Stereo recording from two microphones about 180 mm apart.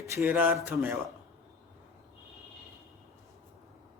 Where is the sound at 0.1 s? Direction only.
15° right (ahead or behind).